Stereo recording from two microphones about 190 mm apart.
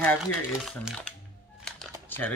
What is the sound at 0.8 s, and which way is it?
Speech, 5° left (ahead or behind).